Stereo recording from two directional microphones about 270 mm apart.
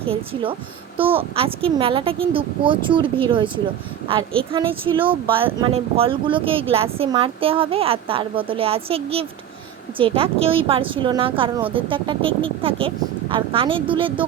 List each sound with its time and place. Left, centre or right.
0.0 s speech: centre
4.5 s speech: centre